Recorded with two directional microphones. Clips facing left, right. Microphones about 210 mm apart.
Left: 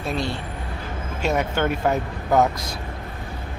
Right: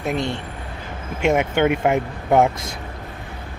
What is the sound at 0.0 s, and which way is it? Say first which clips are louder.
Speech: right 3 dB; 20° right (ahead or behind).